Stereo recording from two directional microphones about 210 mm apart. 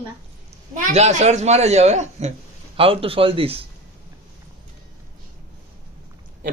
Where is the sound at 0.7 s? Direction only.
35° right (ahead or behind).